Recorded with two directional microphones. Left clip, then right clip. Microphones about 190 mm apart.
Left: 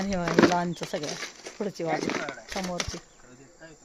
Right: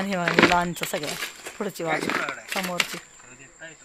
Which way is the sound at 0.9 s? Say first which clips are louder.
Right 3 dB; 10° right (ahead or behind).